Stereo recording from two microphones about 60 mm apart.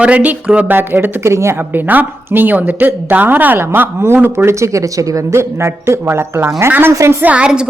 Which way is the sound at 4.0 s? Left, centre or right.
Right.